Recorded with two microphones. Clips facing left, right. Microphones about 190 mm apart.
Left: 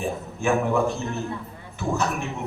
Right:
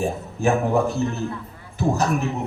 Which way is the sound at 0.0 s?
35° right (ahead or behind).